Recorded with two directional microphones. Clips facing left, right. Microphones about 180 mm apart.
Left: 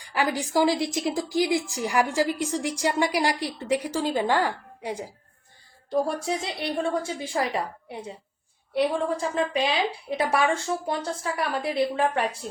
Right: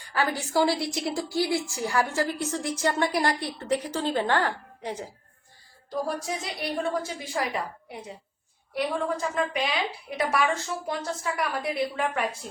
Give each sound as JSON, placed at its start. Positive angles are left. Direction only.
{"t": 0.1, "sound": "a woman's voice", "side_deg": 15}
{"t": 5.9, "sound": "a woman's voice", "side_deg": 30}